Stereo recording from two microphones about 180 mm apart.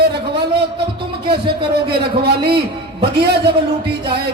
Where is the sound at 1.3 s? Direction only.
30° right (ahead or behind).